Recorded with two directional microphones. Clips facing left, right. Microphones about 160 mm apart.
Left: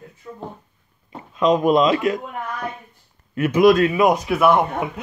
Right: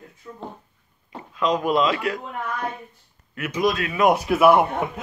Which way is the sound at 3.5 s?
65° left (ahead or behind).